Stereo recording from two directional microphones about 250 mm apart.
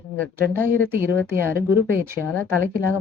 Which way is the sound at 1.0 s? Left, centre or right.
Centre.